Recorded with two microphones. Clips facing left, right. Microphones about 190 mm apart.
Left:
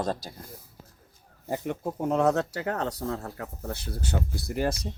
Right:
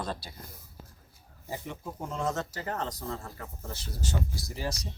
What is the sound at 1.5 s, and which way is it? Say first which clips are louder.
Speech: left 8 dB; 55° left (ahead or behind).